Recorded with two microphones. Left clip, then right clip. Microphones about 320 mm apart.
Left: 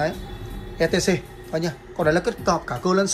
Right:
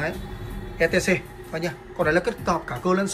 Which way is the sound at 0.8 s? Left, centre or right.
Centre.